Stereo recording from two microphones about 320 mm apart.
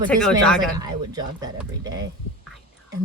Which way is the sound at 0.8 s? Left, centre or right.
Centre.